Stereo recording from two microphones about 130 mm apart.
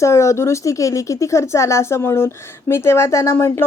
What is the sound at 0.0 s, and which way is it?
Speech, 20° left (ahead or behind).